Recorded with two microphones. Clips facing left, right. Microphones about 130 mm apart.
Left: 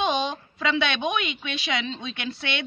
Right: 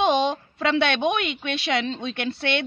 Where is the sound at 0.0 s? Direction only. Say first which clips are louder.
Right 5 dB; 65° right (ahead or behind).